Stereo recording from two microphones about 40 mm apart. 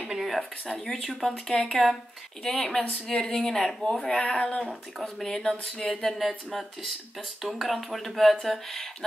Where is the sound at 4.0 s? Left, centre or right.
Left.